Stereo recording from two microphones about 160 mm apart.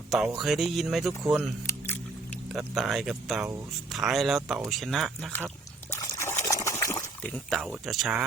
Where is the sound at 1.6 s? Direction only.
15° left (ahead or behind).